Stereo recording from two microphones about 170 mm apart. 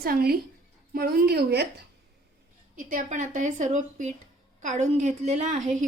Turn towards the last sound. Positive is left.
turn(degrees=-45)  # may be behind; listen again after turning